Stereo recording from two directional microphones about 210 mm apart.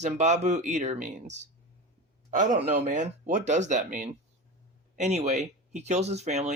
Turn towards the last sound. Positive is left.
turn(degrees=-30)  # may be behind; listen again after turning